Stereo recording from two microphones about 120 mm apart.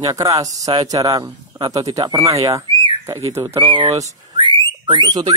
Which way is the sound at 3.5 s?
45° right (ahead or behind).